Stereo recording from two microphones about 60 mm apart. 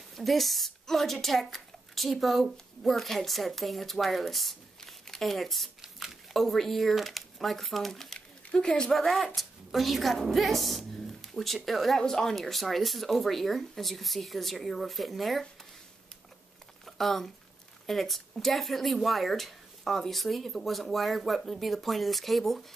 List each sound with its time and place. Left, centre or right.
0.1 s speech: centre
16.8 s a sound: centre
17.8 s speech: centre